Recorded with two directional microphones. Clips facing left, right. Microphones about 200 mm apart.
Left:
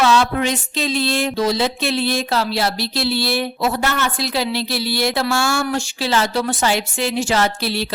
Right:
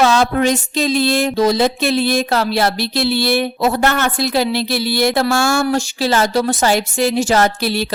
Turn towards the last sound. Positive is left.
turn(degrees=-45)  # may be behind; listen again after turning